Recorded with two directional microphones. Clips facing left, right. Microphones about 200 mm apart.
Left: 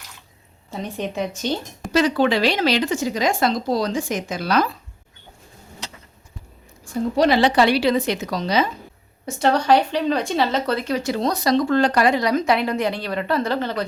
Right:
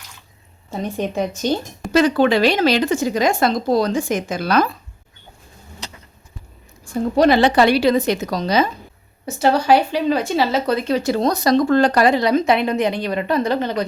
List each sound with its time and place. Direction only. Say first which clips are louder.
0.7 s speech: right 4 dB; 45° right (ahead or behind)
7.2 s speech: right 3 dB; 50° right (ahead or behind)
9.2 s speech: right 2 dB; 5° right (ahead or behind)
10.8 s speech: right 4 dB; 35° right (ahead or behind); by 13.8 s 15° right (ahead or behind)